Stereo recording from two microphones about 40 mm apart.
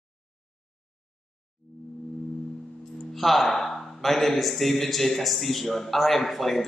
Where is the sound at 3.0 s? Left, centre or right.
Centre.